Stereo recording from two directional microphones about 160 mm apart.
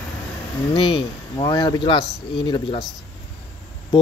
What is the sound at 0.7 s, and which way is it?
Speech, 30° left (ahead or behind).